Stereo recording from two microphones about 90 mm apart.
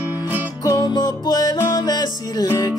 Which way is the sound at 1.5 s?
30° left (ahead or behind).